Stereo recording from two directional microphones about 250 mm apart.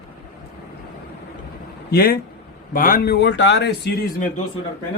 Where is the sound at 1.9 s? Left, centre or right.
Left.